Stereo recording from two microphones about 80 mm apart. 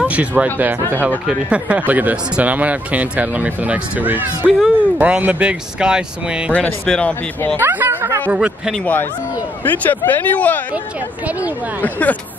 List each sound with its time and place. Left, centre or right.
0.0 s speech: centre
4.5 s speech: centre
4.9 s speech: centre
6.9 s speech: centre
7.5 s speech: right
8.3 s speech: centre
9.7 s speech: left
11.8 s speech: centre